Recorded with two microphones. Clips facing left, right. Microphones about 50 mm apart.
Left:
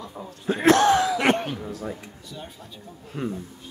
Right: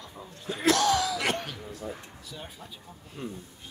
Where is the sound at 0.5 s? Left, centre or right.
Left.